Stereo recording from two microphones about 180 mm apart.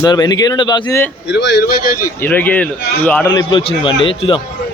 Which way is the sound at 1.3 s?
75° left (ahead or behind).